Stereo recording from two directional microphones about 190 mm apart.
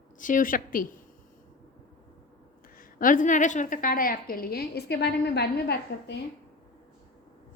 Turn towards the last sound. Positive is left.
turn(degrees=60)  # may be behind; listen again after turning